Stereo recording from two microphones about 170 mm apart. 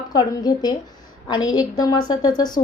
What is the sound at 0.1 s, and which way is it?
A woman's voice, 25° left (ahead or behind).